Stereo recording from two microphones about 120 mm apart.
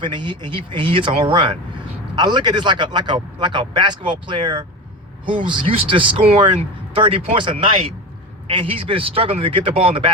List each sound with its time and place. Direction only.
0.0 s speech: 40° right (ahead or behind)